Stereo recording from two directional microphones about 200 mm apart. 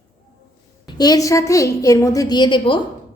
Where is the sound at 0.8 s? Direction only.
20° left (ahead or behind).